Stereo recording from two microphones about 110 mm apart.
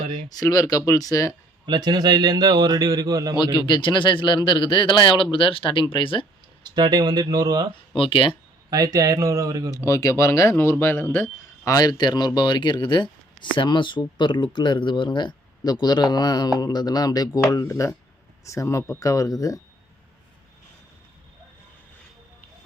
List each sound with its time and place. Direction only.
0.3 s speech: 35° left (ahead or behind)
1.6 s a man's voice: 40° right (ahead or behind)
3.3 s a man's voice: 40° left (ahead or behind)
6.6 s a man's voice: 40° right (ahead or behind)
7.9 s a man's voice: 50° left (ahead or behind)
8.7 s a man's voice: 35° right (ahead or behind)
9.7 s speech: 30° left (ahead or behind)
11.7 s speech: 35° left (ahead or behind)